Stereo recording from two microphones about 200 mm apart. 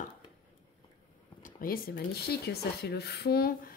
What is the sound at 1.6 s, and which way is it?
A woman's voice, 45° left (ahead or behind).